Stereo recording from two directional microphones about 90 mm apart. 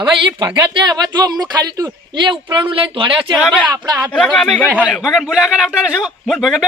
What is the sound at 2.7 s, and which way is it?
Speech, 70° right (ahead or behind).